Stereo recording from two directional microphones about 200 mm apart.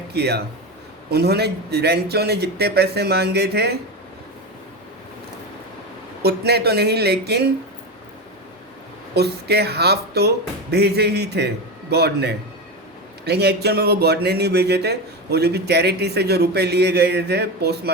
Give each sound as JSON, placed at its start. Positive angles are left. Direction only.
{"t": 0.1, "sound": "a man's voice", "side_deg": -55}
{"t": 6.2, "sound": "a man's voice", "side_deg": -55}
{"t": 9.1, "sound": "speech", "side_deg": -55}